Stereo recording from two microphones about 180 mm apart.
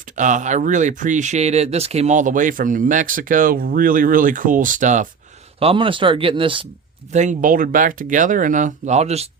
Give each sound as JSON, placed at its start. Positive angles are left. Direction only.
{"t": 0.0, "sound": "speech", "side_deg": -45}
{"t": 5.5, "sound": "speech", "side_deg": -30}
{"t": 7.1, "sound": "speech", "side_deg": -40}